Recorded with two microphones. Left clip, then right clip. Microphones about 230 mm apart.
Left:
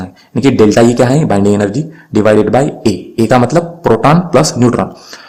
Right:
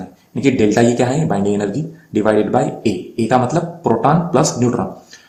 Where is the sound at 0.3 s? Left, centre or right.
Left.